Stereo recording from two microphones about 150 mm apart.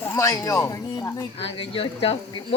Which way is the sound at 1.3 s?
40° left (ahead or behind).